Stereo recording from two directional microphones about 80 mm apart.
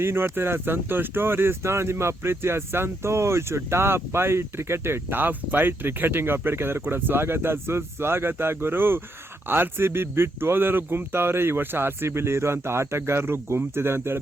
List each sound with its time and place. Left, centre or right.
0.0 s speech: right